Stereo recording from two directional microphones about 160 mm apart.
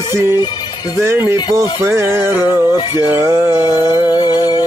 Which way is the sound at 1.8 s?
15° right (ahead or behind).